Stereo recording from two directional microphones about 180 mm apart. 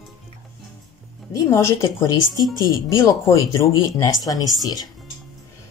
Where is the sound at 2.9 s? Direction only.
15° left (ahead or behind).